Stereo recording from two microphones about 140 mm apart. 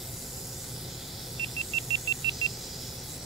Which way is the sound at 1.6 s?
40° right (ahead or behind).